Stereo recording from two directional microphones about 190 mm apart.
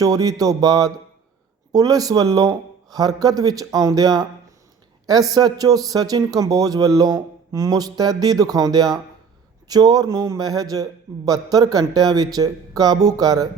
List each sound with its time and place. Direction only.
0.0 s a man's voice: 20° right (ahead or behind)